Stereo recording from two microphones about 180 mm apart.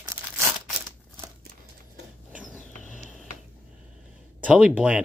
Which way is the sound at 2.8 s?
45° left (ahead or behind).